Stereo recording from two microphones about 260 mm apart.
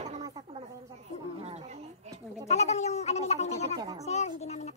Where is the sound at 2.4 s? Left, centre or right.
Left.